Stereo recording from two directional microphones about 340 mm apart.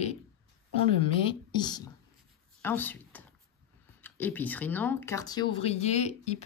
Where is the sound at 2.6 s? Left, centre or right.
Centre.